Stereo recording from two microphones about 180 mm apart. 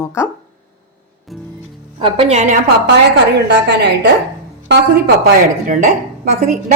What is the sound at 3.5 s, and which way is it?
Speech, 65° right (ahead or behind).